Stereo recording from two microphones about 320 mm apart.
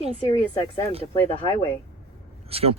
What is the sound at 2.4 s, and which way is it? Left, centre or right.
Speech, centre.